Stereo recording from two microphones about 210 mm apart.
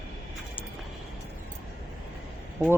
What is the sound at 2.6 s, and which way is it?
Speech, 10° right (ahead or behind).